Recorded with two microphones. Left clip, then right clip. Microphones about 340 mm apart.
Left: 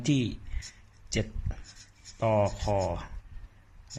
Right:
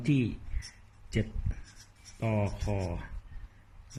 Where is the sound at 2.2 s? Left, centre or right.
Left.